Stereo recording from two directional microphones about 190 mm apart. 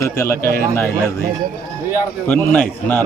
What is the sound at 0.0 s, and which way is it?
Speech, 15° left (ahead or behind).